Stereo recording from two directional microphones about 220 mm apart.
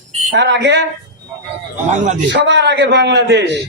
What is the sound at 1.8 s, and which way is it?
Speech, 35° right (ahead or behind).